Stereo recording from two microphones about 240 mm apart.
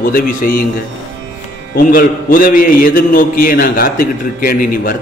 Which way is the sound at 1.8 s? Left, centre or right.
Left.